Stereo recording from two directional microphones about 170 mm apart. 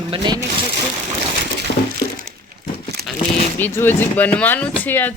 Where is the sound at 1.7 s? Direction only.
65° left (ahead or behind).